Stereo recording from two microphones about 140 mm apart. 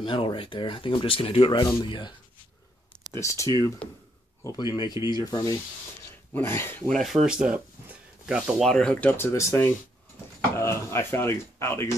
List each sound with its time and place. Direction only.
0.0 s speech: 35° left (ahead or behind)
3.2 s speech: 20° left (ahead or behind)
6.9 s speech: centre (ahead or behind); by 11.9 s 20° left (ahead or behind)